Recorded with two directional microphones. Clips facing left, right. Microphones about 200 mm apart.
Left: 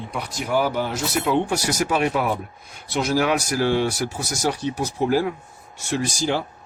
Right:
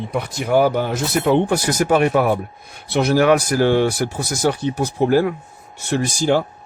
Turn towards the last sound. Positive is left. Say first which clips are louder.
# right 5 dB
turn(degrees=-50)  # may be behind; listen again after turning